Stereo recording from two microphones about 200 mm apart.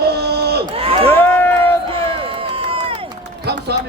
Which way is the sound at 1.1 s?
10° left (ahead or behind).